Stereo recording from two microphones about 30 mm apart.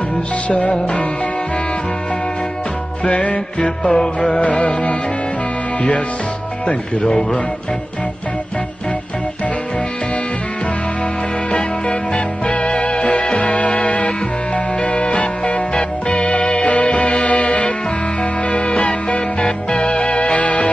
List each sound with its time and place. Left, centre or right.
0.5 s music: left
3.1 s music: left
13.4 s music: left